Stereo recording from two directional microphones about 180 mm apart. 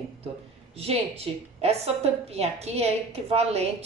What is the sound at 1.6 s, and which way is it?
Speech, 35° right (ahead or behind).